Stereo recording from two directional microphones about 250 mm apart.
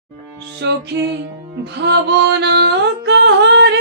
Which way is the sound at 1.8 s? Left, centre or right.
Right.